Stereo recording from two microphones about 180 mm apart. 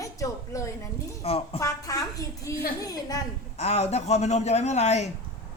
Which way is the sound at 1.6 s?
20° left (ahead or behind).